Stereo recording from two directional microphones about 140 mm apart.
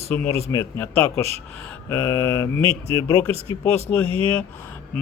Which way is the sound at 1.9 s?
15° left (ahead or behind).